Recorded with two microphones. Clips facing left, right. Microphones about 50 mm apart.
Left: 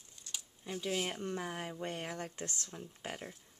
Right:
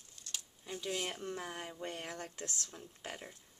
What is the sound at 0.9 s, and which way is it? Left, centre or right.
Speech, centre.